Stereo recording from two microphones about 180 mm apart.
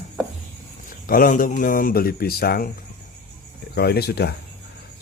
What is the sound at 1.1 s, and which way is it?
Speech, 50° left (ahead or behind).